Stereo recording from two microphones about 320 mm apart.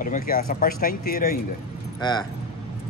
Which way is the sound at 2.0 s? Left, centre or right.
Centre.